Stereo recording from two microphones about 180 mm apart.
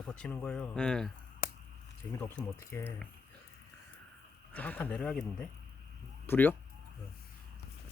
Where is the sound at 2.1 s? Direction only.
15° left (ahead or behind).